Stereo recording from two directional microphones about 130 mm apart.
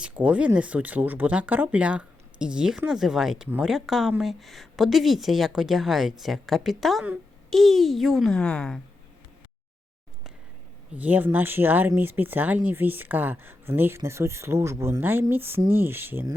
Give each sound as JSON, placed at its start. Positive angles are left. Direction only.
{"t": 0.0, "sound": "a woman's voice", "side_deg": -10}
{"t": 10.9, "sound": "speech", "side_deg": -10}